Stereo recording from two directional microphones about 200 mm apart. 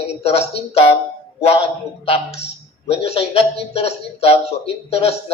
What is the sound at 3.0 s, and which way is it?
A man's voice, 30° left (ahead or behind).